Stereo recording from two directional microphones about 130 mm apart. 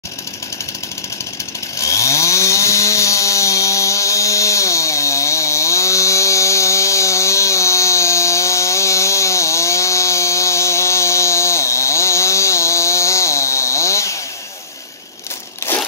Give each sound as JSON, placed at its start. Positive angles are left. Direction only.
{"t": 1.8, "sound": "chainsaw", "side_deg": 25}